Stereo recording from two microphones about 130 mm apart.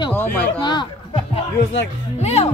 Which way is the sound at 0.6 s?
35° left (ahead or behind).